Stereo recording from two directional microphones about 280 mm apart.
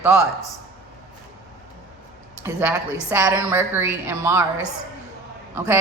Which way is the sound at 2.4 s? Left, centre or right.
Centre.